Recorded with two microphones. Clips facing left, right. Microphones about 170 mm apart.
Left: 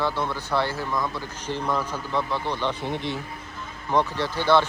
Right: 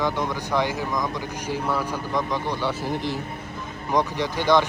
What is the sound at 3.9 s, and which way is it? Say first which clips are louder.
Speech: even; 15° right (ahead or behind).